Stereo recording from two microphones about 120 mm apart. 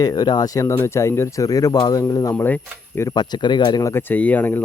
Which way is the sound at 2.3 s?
15° left (ahead or behind).